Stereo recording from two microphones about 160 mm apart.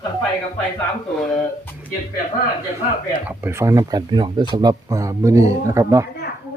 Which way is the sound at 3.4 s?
15° right (ahead or behind).